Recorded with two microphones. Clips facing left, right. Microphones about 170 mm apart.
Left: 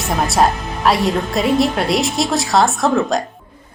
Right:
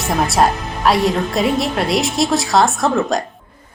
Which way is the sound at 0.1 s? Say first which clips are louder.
Even; centre (ahead or behind).